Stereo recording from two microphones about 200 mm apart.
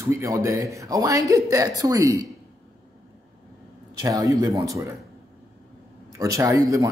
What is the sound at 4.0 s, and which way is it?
Speech, 15° right (ahead or behind).